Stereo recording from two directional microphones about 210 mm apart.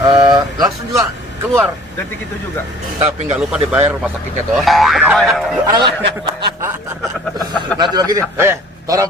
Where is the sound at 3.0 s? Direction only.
30° right (ahead or behind).